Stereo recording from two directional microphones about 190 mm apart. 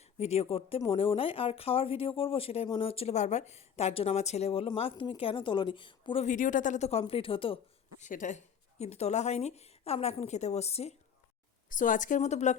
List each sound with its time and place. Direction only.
0.0 s speech: 35° left (ahead or behind)
6.2 s speech: 45° left (ahead or behind)
8.0 s speech: 40° left (ahead or behind)